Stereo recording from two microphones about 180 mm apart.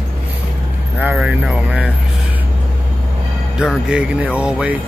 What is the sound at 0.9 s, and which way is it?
Speech, 5° right (ahead or behind).